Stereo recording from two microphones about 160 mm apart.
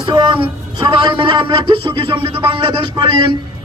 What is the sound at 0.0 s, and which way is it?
A man's voice, 30° right (ahead or behind).